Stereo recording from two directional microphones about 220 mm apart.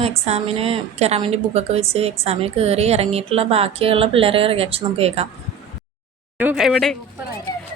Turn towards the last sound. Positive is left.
turn(degrees=0)  # may be behind; listen again after turning